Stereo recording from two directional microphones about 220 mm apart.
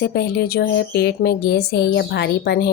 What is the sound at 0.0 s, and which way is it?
A woman's voice, 45° left (ahead or behind).